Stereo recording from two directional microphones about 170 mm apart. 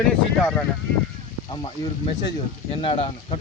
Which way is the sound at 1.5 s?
25° left (ahead or behind).